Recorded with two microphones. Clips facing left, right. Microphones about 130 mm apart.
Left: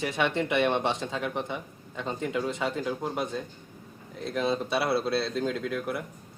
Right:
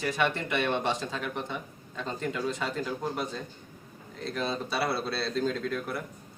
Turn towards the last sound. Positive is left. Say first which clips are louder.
# even
turn(degrees=15)  # may be behind; listen again after turning